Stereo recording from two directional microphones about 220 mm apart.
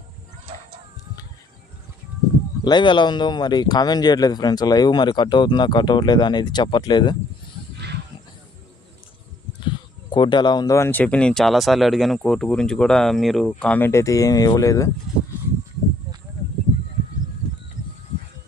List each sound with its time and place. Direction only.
2.6 s speech: 20° left (ahead or behind)
9.6 s speech: 20° left (ahead or behind)